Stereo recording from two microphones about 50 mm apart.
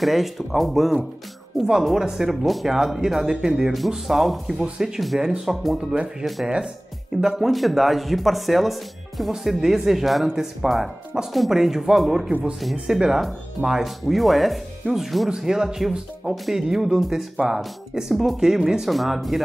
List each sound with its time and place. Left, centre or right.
0.0 s speech: centre
4.6 s speech: centre
5.5 s speech: centre
5.8 s speech: centre
6.2 s speech: centre
12.3 s speech: right
12.9 s speech: centre